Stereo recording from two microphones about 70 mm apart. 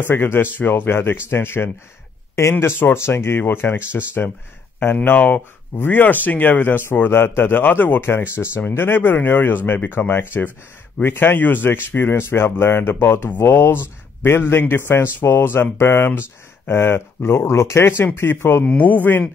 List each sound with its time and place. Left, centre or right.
0.0 s speech: left